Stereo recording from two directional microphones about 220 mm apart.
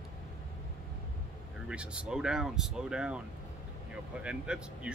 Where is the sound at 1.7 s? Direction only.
5° right (ahead or behind).